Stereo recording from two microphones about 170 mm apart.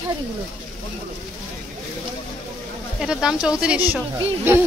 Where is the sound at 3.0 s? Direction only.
5° right (ahead or behind).